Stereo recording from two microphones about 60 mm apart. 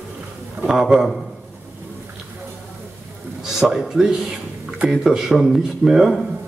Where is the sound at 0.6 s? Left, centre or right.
Centre.